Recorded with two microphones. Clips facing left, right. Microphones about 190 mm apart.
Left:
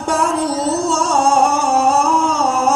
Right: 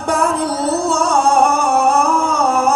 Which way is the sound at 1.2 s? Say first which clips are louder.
Even; 60° right (ahead or behind).